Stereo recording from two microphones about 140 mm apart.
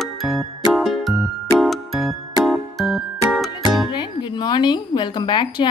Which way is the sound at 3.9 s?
35° left (ahead or behind).